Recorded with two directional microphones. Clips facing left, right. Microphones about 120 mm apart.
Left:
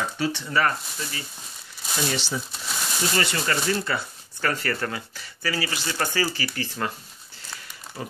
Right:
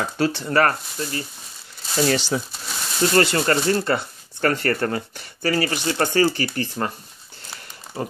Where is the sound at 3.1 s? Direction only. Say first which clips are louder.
Right 8 dB; 45° right (ahead or behind).